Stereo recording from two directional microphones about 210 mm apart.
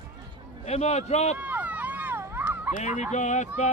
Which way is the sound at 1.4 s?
10° right (ahead or behind).